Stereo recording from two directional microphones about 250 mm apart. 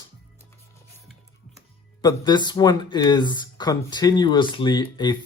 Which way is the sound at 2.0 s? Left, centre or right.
Centre.